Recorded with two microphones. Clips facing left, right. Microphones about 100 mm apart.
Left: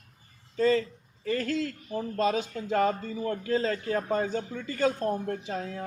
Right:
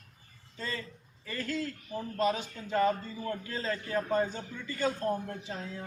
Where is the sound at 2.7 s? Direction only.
50° left (ahead or behind).